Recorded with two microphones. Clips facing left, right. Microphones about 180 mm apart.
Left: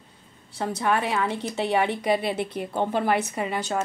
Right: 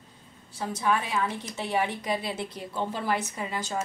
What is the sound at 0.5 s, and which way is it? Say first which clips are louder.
A woman's voice: left 3 dB; 65° left (ahead or behind).